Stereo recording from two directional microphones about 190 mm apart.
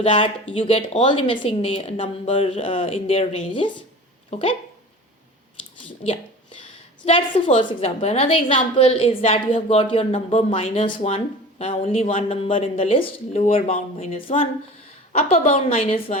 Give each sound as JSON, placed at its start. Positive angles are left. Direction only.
{"t": 0.0, "sound": "speech", "side_deg": 30}
{"t": 7.0, "sound": "a woman's voice", "side_deg": 30}